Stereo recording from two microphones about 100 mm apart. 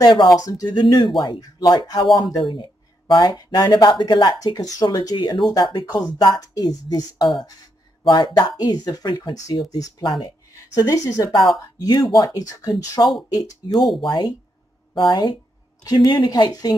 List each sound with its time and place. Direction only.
0.0 s speech: 45° left (ahead or behind)
2.0 s speech: centre (ahead or behind)
2.3 s speech: 50° left (ahead or behind)
4.5 s speech: 40° left (ahead or behind)
5.1 s speech: 50° left (ahead or behind)
14.0 s speech: 50° left (ahead or behind)